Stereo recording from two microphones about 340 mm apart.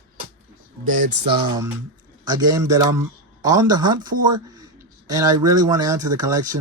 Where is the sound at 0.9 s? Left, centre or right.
Right.